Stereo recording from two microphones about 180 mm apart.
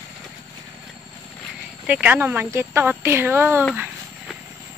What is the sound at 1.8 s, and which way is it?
Speech, 10° right (ahead or behind).